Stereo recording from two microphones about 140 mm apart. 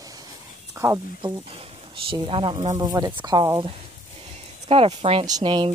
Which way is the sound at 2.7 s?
30° right (ahead or behind).